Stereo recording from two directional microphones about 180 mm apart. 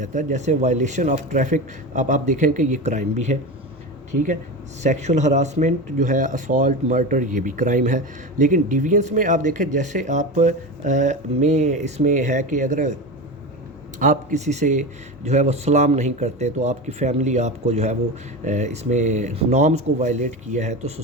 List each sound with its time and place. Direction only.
0.0 s speech: 40° right (ahead or behind)
4.8 s speech: 40° right (ahead or behind)
14.0 s speech: 45° right (ahead or behind)